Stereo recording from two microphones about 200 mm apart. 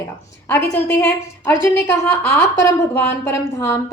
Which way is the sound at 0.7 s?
10° left (ahead or behind).